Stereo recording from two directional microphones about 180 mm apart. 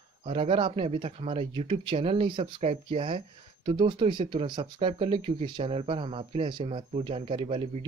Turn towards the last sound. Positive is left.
turn(degrees=-30)  # may be behind; listen again after turning